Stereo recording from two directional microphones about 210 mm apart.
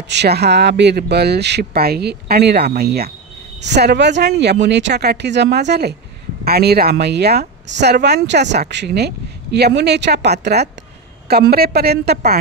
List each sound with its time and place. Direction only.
0.1 s a woman's voice: 50° right (ahead or behind)